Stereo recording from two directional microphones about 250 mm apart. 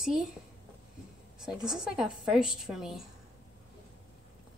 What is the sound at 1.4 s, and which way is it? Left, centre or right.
A woman's voice, centre.